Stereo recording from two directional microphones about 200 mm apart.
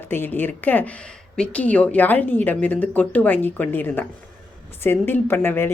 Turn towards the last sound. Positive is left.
turn(degrees=10)  # may be behind; listen again after turning